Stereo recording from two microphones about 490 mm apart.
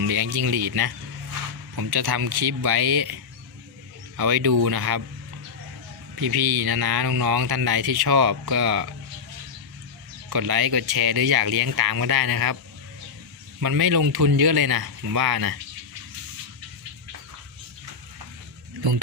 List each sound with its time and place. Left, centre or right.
0.0 s speech: right
4.2 s speech: right
6.1 s speech: right
10.2 s speech: right
13.6 s speech: right